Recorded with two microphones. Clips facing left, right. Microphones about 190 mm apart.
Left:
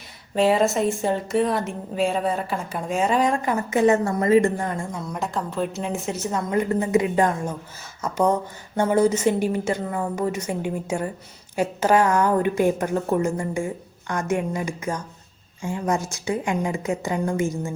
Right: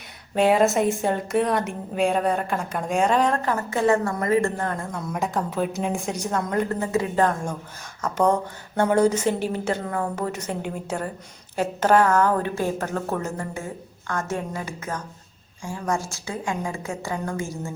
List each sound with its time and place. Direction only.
0.3 s a woman's voice: centre (ahead or behind)
5.0 s a woman's voice: centre (ahead or behind); by 17.7 s 20° left (ahead or behind)